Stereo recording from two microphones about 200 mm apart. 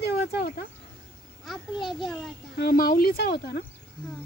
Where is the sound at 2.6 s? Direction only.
50° left (ahead or behind).